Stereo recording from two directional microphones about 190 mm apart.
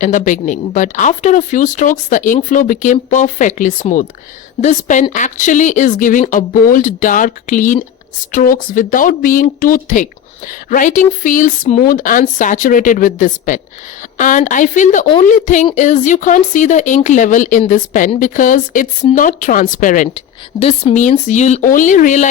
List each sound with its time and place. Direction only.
0.0 s speech: 40° left (ahead or behind)
20.6 s speech: 30° left (ahead or behind)